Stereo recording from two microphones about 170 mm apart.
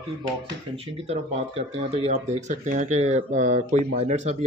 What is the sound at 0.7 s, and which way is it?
Speech, 35° right (ahead or behind).